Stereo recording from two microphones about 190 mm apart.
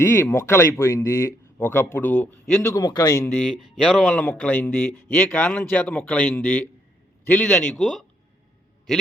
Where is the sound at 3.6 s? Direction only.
Centre (ahead or behind).